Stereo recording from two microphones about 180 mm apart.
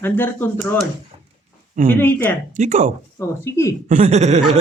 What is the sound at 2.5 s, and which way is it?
Speech, 40° right (ahead or behind).